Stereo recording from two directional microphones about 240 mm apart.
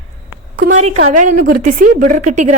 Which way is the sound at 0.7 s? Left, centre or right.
Right.